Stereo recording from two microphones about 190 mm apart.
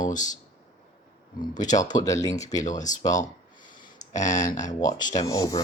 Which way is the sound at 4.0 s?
40° left (ahead or behind).